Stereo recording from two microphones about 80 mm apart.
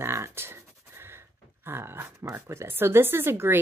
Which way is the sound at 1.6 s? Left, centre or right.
Right.